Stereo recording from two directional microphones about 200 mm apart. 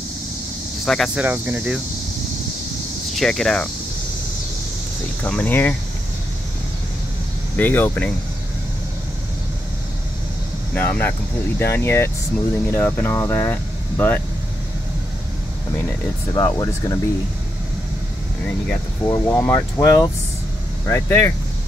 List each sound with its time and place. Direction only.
0.8 s speech: centre (ahead or behind)
3.1 s speech: centre (ahead or behind)
5.2 s speech: 5° left (ahead or behind)
7.5 s speech: 10° left (ahead or behind)
10.7 s speech: 10° left (ahead or behind)
16.3 s speech: 20° left (ahead or behind)
19.0 s speech: 10° left (ahead or behind)